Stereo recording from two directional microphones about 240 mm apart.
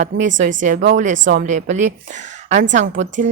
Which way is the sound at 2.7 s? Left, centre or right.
Right.